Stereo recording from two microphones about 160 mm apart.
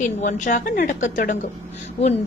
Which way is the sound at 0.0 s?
50° left (ahead or behind).